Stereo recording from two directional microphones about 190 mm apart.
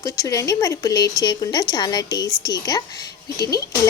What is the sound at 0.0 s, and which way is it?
A woman's voice, 15° left (ahead or behind).